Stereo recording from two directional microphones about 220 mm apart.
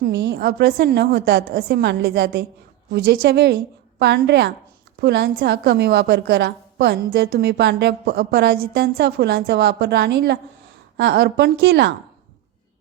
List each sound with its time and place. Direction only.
0.0 s a woman's voice: 45° right (ahead or behind)